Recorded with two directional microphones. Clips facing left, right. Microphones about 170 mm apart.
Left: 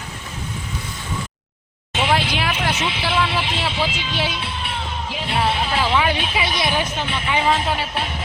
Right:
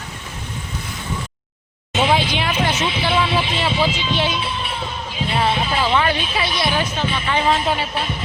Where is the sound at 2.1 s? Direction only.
5° left (ahead or behind).